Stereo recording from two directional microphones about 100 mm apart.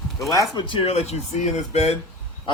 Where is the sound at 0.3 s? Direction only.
35° left (ahead or behind).